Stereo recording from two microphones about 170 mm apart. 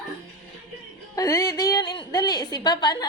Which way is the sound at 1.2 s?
20° left (ahead or behind).